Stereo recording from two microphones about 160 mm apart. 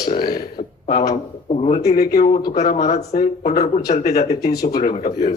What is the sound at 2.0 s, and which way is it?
Speech, 70° left (ahead or behind).